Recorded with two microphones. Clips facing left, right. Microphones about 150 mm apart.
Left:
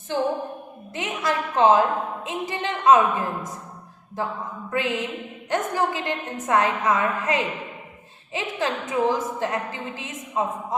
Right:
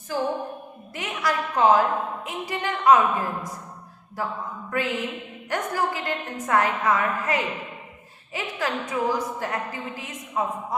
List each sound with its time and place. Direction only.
0.9 s a woman's voice: 20° left (ahead or behind)